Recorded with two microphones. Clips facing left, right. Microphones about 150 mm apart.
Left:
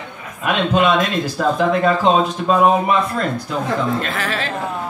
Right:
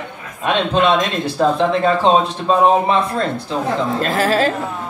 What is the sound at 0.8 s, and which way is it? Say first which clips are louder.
A man's voice: right 1 dB; 30° right (ahead or behind).